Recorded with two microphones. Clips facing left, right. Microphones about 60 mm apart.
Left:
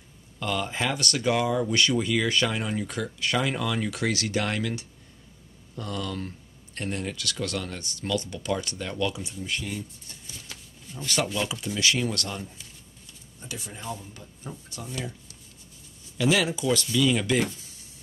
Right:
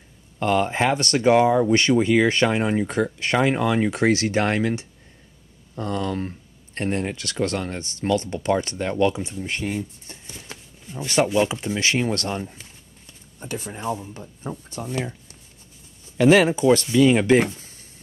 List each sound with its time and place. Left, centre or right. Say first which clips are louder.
0.4 s speech: right 8 dB; right